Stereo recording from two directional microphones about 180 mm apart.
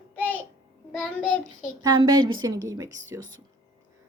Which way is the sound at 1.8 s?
25° right (ahead or behind).